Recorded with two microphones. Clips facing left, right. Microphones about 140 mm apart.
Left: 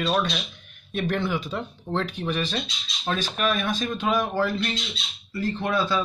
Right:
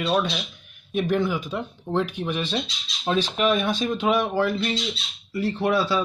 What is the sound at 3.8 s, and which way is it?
Speech, 10° right (ahead or behind).